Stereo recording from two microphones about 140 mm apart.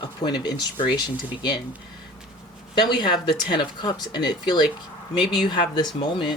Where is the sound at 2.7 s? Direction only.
35° left (ahead or behind).